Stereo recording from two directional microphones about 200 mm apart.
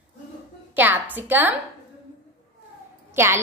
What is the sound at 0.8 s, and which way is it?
Speech, 10° right (ahead or behind).